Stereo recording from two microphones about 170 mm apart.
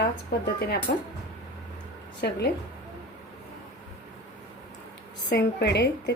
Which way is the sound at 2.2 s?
65° left (ahead or behind).